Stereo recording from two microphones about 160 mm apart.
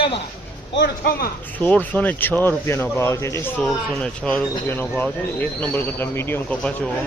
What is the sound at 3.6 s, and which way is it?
Speech, 5° left (ahead or behind).